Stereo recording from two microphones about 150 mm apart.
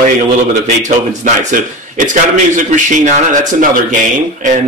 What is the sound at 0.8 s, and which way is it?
A man's voice, 55° right (ahead or behind).